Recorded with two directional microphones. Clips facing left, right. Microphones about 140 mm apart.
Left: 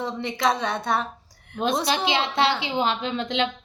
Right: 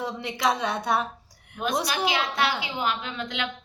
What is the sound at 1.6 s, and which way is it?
A woman's voice, 25° left (ahead or behind).